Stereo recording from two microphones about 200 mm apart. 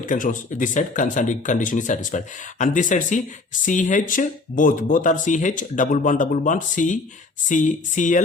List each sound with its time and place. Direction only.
0.0 s speech: 40° left (ahead or behind)